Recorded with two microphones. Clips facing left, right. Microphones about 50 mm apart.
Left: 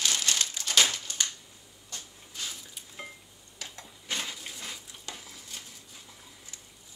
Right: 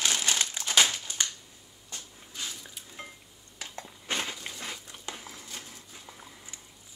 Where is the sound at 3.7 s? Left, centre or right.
Right.